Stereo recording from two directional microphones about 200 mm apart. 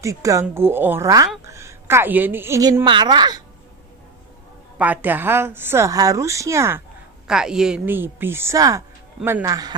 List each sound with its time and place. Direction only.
0.0 s a woman's voice: 15° right (ahead or behind)
4.8 s a woman's voice: 10° right (ahead or behind)